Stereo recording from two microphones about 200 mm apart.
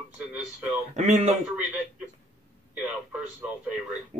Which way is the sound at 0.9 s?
35° right (ahead or behind).